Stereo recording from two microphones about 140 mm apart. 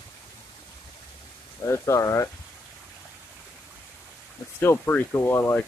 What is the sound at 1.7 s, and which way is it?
Speech, 20° left (ahead or behind).